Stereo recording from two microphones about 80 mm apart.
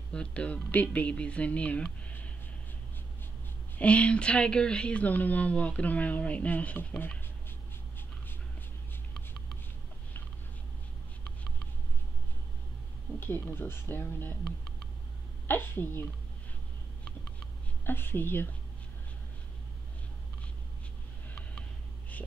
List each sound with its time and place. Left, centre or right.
0.1 s speech: centre
2.0 s a sound: centre
3.7 s speech: centre
13.2 s speech: left
15.4 s speech: left
17.8 s speech: left